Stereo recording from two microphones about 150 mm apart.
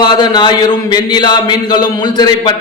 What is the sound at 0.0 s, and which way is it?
Mantra, 30° left (ahead or behind).